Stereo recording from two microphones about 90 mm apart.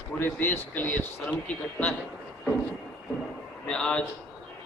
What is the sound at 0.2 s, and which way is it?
Speech, 20° left (ahead or behind).